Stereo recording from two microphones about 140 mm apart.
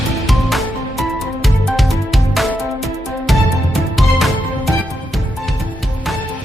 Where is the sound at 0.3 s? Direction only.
Centre (ahead or behind).